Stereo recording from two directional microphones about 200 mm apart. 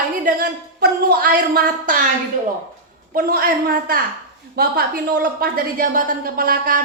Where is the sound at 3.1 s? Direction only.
45° right (ahead or behind).